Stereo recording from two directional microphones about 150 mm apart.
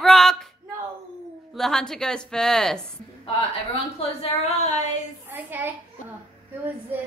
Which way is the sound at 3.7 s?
45° left (ahead or behind).